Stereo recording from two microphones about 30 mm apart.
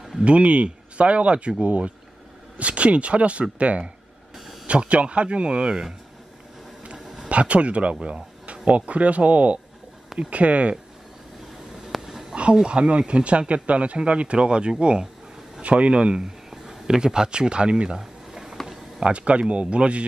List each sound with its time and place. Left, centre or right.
0.2 s speech: right
5.7 s speech: right
7.2 s a man's voice: right
8.6 s speech: right
11.9 s a sound: centre
12.6 s speech: right
17.9 s a sound: centre
18.9 s speech: right